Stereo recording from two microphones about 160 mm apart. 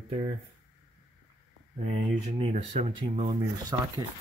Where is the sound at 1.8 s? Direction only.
45° right (ahead or behind).